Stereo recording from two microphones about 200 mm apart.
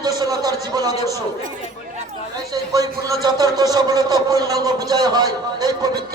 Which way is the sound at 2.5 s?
15° right (ahead or behind).